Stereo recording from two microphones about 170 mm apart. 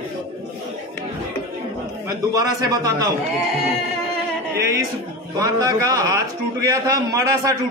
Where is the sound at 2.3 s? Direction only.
20° right (ahead or behind).